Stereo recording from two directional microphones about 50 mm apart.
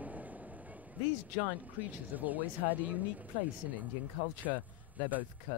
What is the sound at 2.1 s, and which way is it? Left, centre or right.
Speech, right.